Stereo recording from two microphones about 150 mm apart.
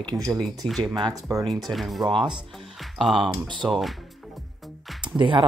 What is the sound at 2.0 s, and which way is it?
Speech, 30° right (ahead or behind).